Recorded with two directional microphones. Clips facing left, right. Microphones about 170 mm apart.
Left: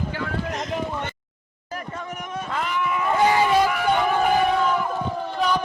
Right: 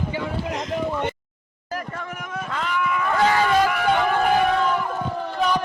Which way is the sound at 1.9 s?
20° left (ahead or behind).